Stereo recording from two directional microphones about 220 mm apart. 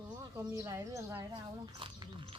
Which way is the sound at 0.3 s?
15° right (ahead or behind).